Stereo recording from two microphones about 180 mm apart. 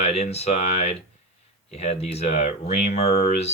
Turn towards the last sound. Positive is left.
turn(degrees=35)  # may be behind; listen again after turning